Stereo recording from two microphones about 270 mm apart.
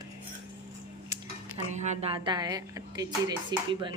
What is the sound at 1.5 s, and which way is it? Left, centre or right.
Speech, right.